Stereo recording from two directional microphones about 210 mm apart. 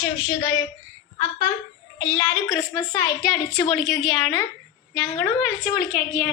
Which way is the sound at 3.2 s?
Centre (ahead or behind).